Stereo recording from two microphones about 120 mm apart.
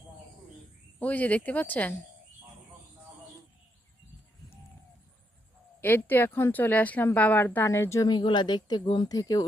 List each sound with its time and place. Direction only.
0.9 s speech: 15° left (ahead or behind)
5.8 s speech: 15° left (ahead or behind)
8.0 s speech: 40° left (ahead or behind)